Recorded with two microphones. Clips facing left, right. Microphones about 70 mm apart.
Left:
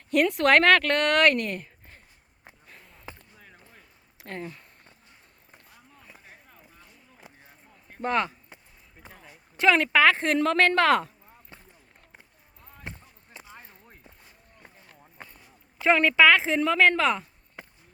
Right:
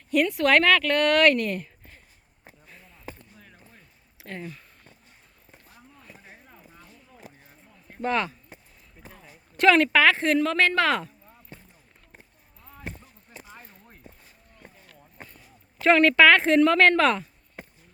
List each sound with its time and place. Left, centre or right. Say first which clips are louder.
0.1 s speech: even; left
2.7 s chop: even; left
4.2 s speech: left 1 dB; left
8.0 s speech: even; left
9.6 s a woman's voice: right 3 dB; centre
10.0 s a woman's voice: right 1 dB; left
15.8 s a woman's voice: right 2 dB; centre